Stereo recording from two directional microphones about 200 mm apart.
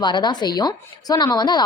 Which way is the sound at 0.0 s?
20° left (ahead or behind).